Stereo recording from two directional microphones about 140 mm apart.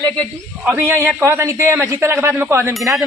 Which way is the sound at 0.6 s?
15° right (ahead or behind).